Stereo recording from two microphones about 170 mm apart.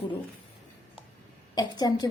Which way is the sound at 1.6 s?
25° left (ahead or behind).